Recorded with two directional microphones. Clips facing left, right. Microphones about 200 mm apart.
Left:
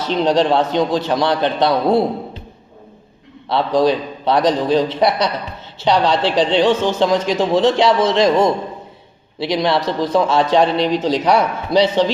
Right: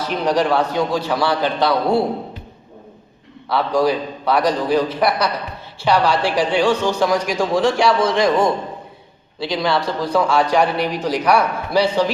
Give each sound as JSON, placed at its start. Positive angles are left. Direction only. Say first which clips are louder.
{"t": 0.0, "sound": "a man's voice", "louder": "left 3 dB", "side_deg": 25}
{"t": 3.5, "sound": "a man's voice", "louder": "left 2 dB", "side_deg": 20}